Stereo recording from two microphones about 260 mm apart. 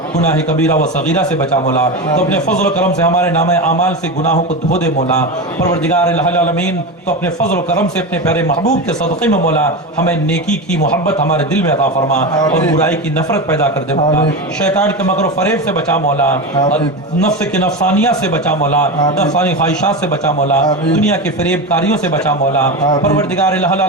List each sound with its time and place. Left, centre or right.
2.7 s a man's voice: centre
4.2 s a man's voice: left
5.6 s a man's voice: centre
7.8 s a man's voice: centre
10.1 s a man's voice: centre
14.6 s a man's voice: centre
17.8 s a man's voice: centre
22.9 s a man's voice: centre